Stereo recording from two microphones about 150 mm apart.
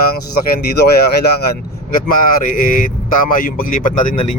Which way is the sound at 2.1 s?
70° left (ahead or behind).